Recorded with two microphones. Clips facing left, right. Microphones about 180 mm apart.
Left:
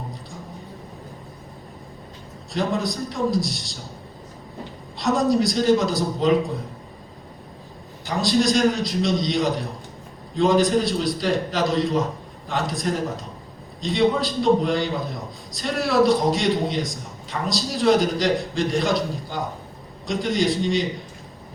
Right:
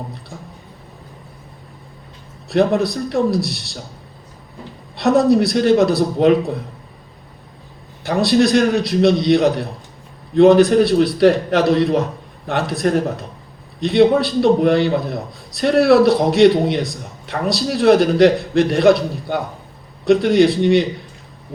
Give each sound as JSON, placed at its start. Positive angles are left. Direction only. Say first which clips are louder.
{"t": 2.5, "sound": "a man's voice", "louder": "right 8 dB", "side_deg": -65}
{"t": 4.9, "sound": "a man's voice", "louder": "right 6 dB", "side_deg": -65}
{"t": 8.0, "sound": "a man's voice", "louder": "right 6 dB", "side_deg": -65}